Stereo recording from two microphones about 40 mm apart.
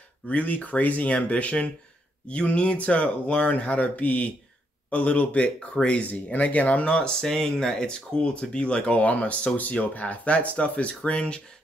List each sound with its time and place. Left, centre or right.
0.3 s speech: left
6.9 s speech: centre
8.2 s speech: left